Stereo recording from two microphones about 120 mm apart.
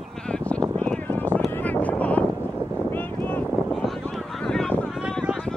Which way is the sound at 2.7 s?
15° left (ahead or behind).